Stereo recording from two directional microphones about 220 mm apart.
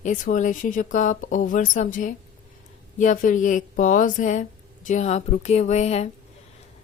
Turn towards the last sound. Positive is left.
turn(degrees=30)  # may be behind; listen again after turning